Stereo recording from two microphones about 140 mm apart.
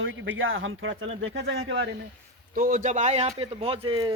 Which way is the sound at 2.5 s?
80° right.